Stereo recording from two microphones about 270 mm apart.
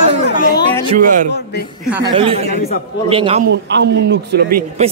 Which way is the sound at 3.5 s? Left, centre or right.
Right.